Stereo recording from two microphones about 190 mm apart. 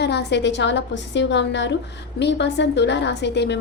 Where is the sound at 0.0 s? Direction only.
60° left (ahead or behind).